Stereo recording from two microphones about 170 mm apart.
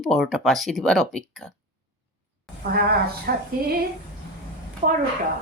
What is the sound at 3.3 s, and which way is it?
Speech, 65° right (ahead or behind).